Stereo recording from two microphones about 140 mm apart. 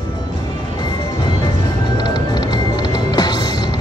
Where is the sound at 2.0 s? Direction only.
30° left (ahead or behind).